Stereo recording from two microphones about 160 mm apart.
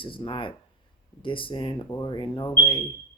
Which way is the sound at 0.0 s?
35° left (ahead or behind).